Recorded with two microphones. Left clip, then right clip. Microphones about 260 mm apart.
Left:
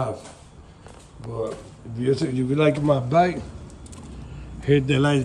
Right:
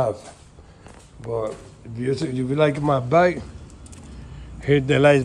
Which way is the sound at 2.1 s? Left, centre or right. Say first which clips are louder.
Left 2 dB; centre.